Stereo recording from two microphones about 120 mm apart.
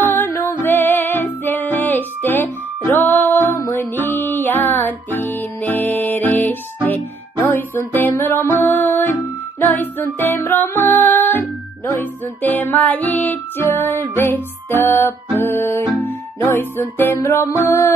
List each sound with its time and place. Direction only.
0.1 s music: 20° left (ahead or behind)